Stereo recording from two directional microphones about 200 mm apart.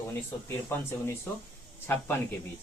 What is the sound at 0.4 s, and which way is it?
Speech, 10° left (ahead or behind).